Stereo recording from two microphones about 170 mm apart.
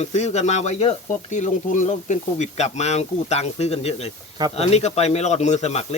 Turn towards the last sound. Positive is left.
turn(degrees=40)  # may be behind; listen again after turning